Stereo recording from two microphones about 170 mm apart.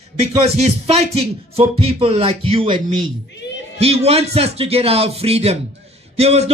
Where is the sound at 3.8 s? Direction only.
35° right (ahead or behind).